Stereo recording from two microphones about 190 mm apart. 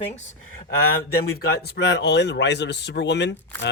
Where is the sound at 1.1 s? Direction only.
55° left (ahead or behind).